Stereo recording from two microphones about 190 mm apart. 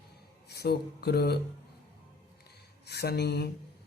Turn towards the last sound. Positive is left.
turn(degrees=60)  # may be behind; listen again after turning